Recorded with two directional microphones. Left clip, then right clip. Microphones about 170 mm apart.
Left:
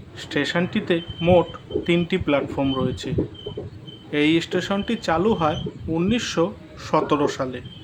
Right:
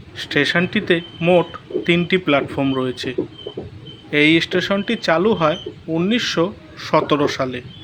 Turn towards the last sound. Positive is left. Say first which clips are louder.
# right 4 dB
turn(degrees=-10)  # may be behind; listen again after turning